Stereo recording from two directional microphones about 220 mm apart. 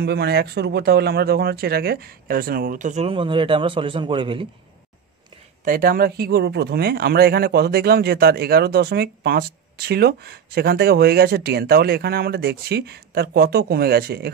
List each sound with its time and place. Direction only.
0.0 s speech: 45° right (ahead or behind); by 4.5 s 25° right (ahead or behind)
5.7 s speech: 40° right (ahead or behind)